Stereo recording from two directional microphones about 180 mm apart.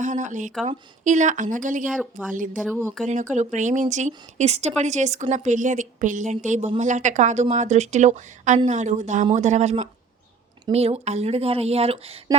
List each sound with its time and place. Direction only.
0.0 s speech: 45° right (ahead or behind)
1.9 s speech: centre (ahead or behind)
2.3 s a woman's voice: 45° right (ahead or behind)